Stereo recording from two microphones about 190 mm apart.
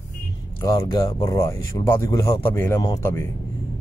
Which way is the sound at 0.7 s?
15° left (ahead or behind).